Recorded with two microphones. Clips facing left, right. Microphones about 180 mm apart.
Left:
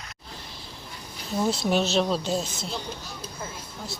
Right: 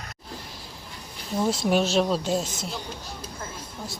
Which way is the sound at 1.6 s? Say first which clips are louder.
Right 2 dB; 10° right (ahead or behind).